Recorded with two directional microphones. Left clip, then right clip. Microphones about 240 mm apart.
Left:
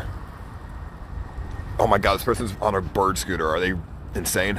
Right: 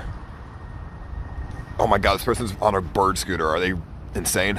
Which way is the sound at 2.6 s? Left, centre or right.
Centre.